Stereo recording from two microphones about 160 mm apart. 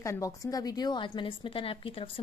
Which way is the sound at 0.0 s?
20° left (ahead or behind).